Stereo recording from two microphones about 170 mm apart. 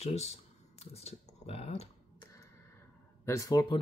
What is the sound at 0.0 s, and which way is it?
Computer keyboard, 40° left (ahead or behind).